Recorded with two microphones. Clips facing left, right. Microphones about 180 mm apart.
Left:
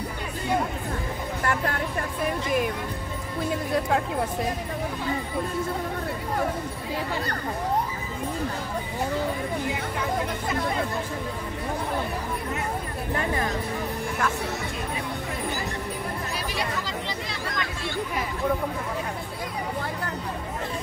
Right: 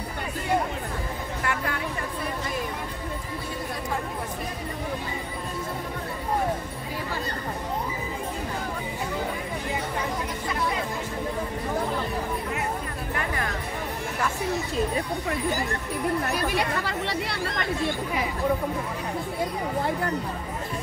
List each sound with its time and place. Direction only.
13.1 s music: 25° left (ahead or behind)
16.3 s chatter: 65° right (ahead or behind)